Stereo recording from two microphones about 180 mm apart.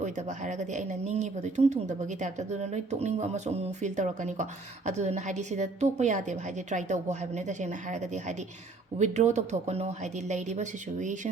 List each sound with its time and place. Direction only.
0.0 s speech: 40° right (ahead or behind)